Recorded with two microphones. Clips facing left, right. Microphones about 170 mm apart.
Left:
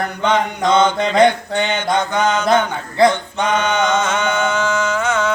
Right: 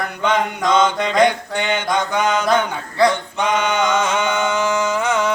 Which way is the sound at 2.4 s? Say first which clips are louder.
Left 2 dB; 25° left (ahead or behind).